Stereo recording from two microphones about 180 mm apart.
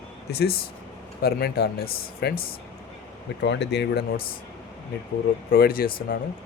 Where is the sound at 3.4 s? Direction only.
75° left (ahead or behind).